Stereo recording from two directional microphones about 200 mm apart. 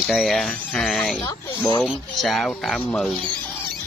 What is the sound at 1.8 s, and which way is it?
Speech, centre (ahead or behind).